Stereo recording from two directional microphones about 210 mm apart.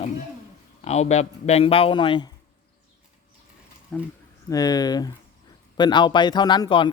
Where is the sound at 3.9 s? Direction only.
5° left (ahead or behind).